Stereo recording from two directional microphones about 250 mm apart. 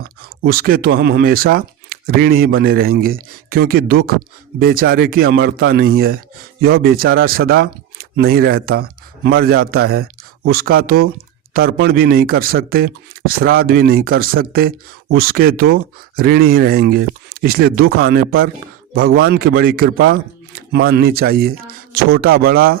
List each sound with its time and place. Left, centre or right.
0.0 s speech: right